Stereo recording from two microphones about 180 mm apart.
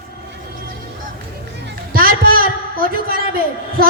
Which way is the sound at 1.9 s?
55° right (ahead or behind).